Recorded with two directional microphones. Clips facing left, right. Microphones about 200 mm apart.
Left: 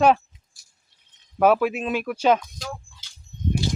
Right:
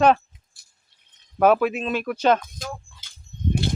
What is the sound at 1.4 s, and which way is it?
Speech, 5° left (ahead or behind).